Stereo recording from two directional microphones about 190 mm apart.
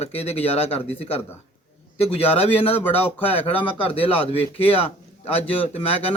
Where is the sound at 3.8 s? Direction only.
30° left (ahead or behind).